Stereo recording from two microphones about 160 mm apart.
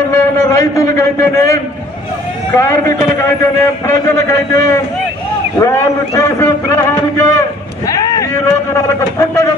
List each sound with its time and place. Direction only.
0.1 s a man's voice: 20° left (ahead or behind)